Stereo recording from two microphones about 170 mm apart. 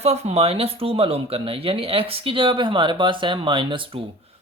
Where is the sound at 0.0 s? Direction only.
40° right (ahead or behind).